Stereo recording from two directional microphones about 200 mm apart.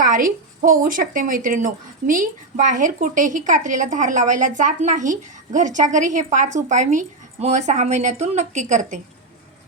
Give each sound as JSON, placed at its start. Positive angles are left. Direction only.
{"t": 0.0, "sound": "a woman's voice", "side_deg": -45}